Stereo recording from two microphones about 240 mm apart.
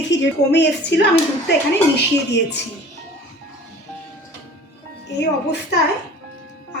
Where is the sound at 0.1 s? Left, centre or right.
Left.